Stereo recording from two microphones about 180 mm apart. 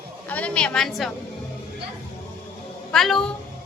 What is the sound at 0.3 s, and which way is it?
Speech, 10° left (ahead or behind).